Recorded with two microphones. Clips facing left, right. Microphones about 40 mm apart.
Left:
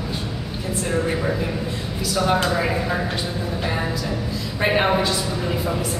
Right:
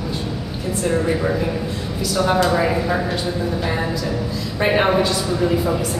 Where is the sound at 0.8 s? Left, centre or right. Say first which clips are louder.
Right 4 dB; centre.